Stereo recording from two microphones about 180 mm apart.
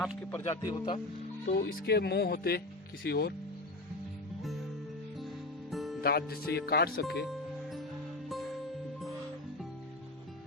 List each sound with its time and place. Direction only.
0.2 s speech: 15° left (ahead or behind)
0.7 s speech: 30° left (ahead or behind)
1.5 s speech: 60° left (ahead or behind)
5.7 s music: centre (ahead or behind)
6.0 s speech: 60° left (ahead or behind)